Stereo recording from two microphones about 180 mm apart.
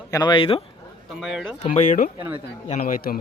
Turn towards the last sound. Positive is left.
turn(degrees=55)  # may be behind; listen again after turning